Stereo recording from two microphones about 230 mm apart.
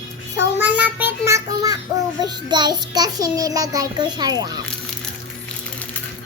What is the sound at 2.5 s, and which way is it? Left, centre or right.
A child's voice, centre.